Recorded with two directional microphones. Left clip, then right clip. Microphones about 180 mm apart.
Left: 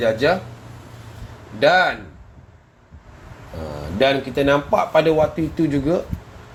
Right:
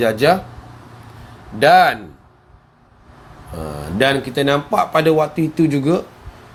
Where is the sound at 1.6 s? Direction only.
40° right (ahead or behind).